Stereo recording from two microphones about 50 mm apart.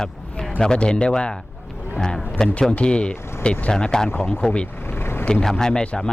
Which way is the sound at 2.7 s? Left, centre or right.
Left.